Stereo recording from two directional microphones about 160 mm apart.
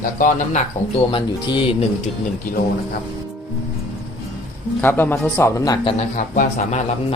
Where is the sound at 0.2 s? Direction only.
50° left (ahead or behind).